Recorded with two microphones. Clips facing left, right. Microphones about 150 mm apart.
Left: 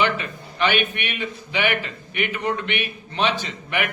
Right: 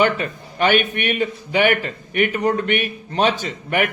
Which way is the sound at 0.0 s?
45° right (ahead or behind).